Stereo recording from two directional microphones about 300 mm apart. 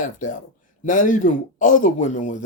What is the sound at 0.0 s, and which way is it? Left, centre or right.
Speech, left.